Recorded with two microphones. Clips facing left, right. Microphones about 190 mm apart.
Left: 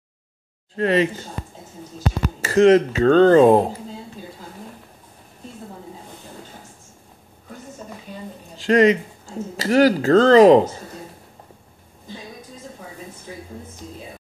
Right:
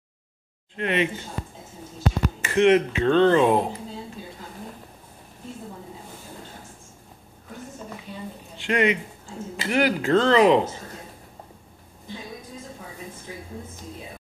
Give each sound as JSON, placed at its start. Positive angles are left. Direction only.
{"t": 0.7, "sound": "speech", "side_deg": 35}
{"t": 2.4, "sound": "speech", "side_deg": 35}
{"t": 8.5, "sound": "speech", "side_deg": 40}